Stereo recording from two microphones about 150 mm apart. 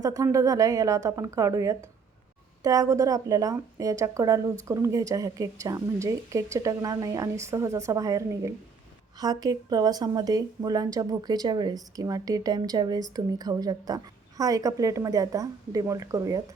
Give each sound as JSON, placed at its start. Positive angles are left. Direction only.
{"t": 0.0, "sound": "speech", "side_deg": -20}